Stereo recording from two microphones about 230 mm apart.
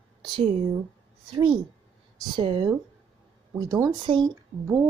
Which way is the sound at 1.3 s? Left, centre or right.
Right.